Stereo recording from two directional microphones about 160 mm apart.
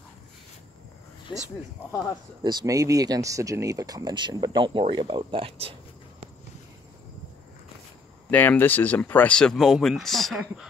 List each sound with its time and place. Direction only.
2.4 s speech: 25° right (ahead or behind)
8.3 s speech: 10° left (ahead or behind)